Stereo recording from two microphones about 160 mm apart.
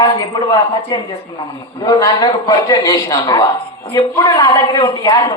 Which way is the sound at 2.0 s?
20° left (ahead or behind).